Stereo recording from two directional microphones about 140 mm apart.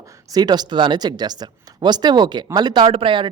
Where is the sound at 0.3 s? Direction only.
30° right (ahead or behind).